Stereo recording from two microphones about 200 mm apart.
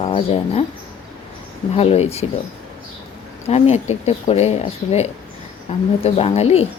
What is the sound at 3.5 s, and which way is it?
A woman's voice, 35° left (ahead or behind).